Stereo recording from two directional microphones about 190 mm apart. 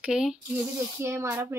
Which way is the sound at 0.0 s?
5° right (ahead or behind).